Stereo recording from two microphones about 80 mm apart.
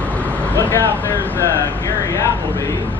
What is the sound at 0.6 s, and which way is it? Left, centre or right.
Speech, left.